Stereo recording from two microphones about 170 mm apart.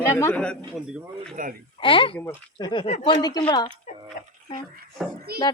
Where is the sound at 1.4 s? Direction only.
50° right (ahead or behind).